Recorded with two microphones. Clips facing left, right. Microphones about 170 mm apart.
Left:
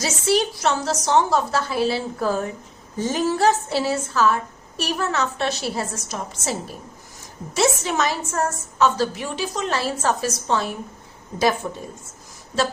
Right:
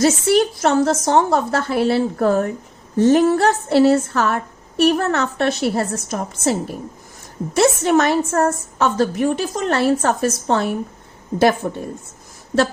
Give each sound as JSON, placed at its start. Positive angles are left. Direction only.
{"t": 0.0, "sound": "a woman's voice", "side_deg": -55}